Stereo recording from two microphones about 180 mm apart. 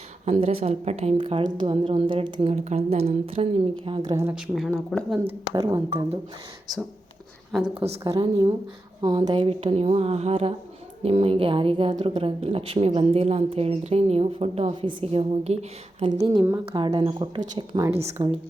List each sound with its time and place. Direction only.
0.3 s a woman's voice: 40° right (ahead or behind)
4.1 s speech: 15° right (ahead or behind)
4.4 s speech: centre (ahead or behind)
5.5 s speech: 20° right (ahead or behind)
8.0 s a woman's voice: 20° right (ahead or behind)